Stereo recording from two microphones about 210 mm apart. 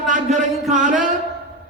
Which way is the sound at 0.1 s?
35° right (ahead or behind).